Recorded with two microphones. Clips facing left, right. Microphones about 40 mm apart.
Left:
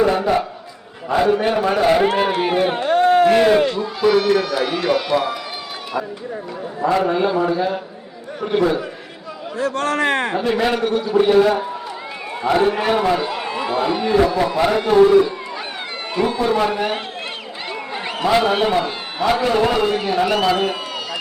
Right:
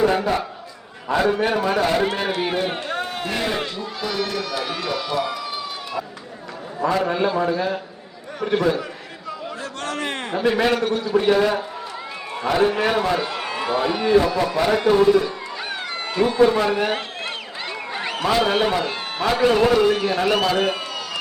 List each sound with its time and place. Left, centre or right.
0.2 s a man's voice: centre
2.7 s speech: left
4.0 s a man's voice: centre
6.8 s a man's voice: centre
9.6 s speech: left
10.6 s a man's voice: centre
13.2 s run: centre
13.8 s a man's voice: centre
16.5 s a man's voice: centre
17.9 s a sound: centre
18.5 s a man's voice: centre
20.1 s a man's voice: centre